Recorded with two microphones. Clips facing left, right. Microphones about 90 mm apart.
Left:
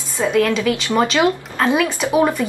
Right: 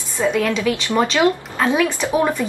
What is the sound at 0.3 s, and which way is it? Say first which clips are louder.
Speech: left 3 dB; centre (ahead or behind).